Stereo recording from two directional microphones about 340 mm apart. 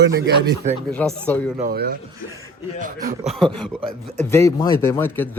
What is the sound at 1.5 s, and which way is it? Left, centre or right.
Speech, right.